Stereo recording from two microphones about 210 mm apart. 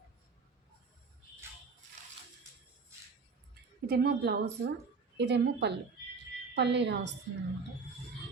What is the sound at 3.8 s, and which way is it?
A woman's voice, 50° right (ahead or behind).